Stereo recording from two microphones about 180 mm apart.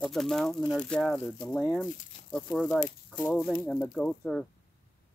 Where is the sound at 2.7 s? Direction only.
40° left (ahead or behind).